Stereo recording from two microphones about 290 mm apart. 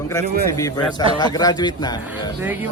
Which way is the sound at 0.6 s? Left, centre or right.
Centre.